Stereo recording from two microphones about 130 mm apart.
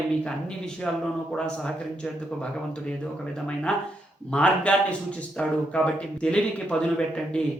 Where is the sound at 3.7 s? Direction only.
5° left (ahead or behind).